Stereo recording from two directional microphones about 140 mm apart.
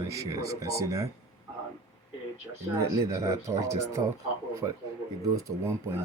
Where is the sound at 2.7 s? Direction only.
20° right (ahead or behind).